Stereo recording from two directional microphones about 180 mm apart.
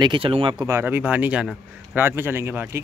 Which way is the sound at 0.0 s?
30° right (ahead or behind).